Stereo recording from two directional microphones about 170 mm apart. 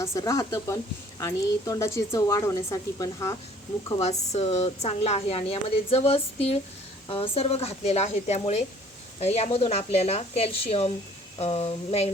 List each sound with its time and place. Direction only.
0.0 s speech: 20° left (ahead or behind)
3.8 s speech: 35° left (ahead or behind)